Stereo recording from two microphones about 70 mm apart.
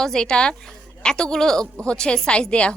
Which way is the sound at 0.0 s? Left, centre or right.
Centre.